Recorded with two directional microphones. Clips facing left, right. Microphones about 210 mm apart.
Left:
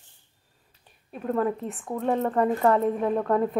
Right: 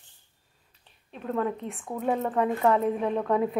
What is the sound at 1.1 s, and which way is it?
A woman's voice, 5° left (ahead or behind).